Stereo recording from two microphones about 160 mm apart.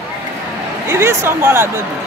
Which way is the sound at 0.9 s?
15° right (ahead or behind).